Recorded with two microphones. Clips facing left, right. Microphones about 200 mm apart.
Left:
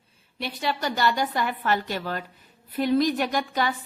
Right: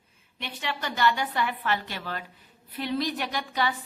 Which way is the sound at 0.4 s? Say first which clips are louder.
Left 6 dB; 35° left (ahead or behind).